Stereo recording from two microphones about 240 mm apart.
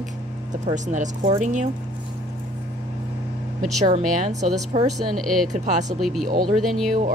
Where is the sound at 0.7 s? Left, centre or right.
Right.